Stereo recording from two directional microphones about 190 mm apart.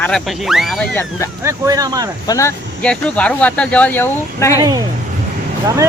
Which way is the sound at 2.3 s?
15° left (ahead or behind).